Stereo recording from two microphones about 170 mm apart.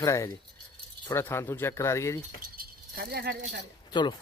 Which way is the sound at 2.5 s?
60° right (ahead or behind).